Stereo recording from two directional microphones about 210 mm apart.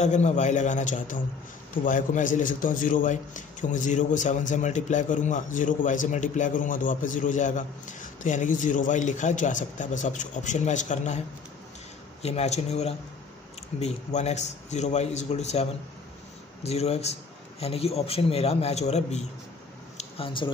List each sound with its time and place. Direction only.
0.0 s a man's voice: 35° left (ahead or behind)
12.2 s a man's voice: 30° left (ahead or behind)